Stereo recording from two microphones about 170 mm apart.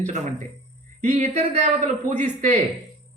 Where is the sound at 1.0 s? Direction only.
40° right (ahead or behind).